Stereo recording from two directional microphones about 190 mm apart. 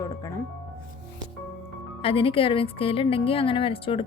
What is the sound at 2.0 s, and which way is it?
A woman's voice, 30° left (ahead or behind).